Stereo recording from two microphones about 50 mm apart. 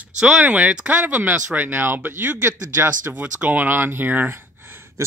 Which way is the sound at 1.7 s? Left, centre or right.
Right.